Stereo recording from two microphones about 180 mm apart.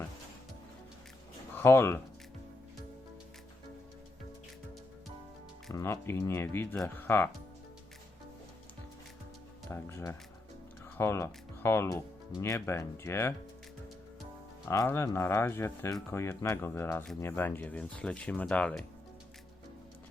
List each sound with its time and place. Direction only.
1.5 s speech: 15° left (ahead or behind)
5.7 s speech: 15° left (ahead or behind)
9.6 s speech: 15° left (ahead or behind)
14.7 s speech: 15° left (ahead or behind)